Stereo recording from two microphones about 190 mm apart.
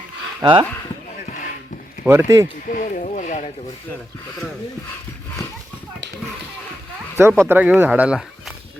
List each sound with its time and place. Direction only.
0.4 s speech: 20° right (ahead or behind)
2.0 s speech: 15° right (ahead or behind)
2.6 s speech: 45° left (ahead or behind)
7.2 s speech: 10° right (ahead or behind)